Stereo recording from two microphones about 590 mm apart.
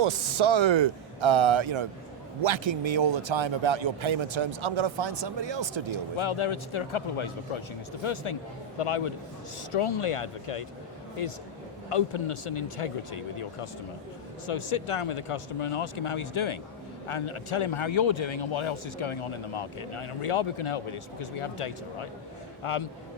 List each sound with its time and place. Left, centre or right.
0.0 s speech: right
6.1 s a man's voice: left